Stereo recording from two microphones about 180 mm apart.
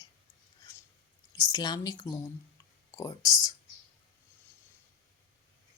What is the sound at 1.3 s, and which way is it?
A woman's voice, 20° left (ahead or behind).